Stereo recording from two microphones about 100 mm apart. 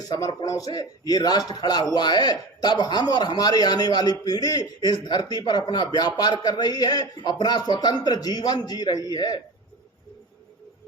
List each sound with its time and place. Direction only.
0.1 s a man's voice: 40° left (ahead or behind)